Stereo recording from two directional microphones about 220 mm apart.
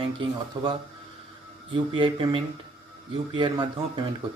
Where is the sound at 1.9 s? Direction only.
25° right (ahead or behind).